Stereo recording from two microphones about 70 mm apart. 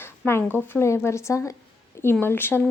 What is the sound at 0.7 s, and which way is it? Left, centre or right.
Speech, left.